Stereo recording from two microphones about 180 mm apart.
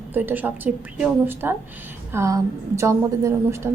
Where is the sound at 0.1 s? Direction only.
10° right (ahead or behind).